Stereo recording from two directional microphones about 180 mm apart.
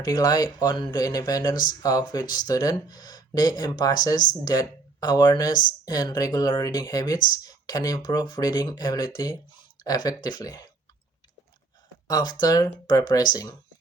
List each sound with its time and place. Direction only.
0.0 s speech: 20° left (ahead or behind)
12.0 s speech: 25° left (ahead or behind)